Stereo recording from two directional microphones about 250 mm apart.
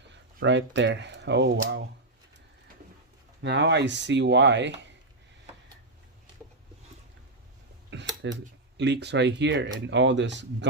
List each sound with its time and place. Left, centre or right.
0.1 s speech: right
3.4 s speech: right
8.8 s speech: right